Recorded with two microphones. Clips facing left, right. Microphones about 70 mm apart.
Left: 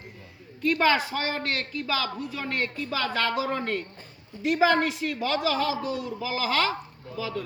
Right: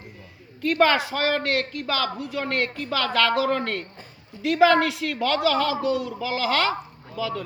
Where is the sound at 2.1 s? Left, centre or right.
Right.